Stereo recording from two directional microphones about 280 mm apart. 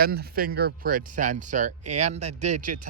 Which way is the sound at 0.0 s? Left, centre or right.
Right.